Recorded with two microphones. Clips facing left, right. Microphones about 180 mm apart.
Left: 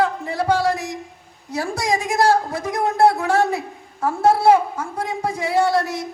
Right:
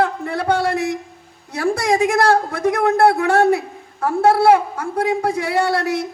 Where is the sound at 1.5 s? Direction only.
60° right (ahead or behind).